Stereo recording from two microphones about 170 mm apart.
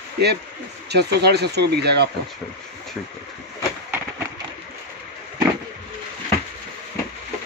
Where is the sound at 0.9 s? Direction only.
75° right (ahead or behind).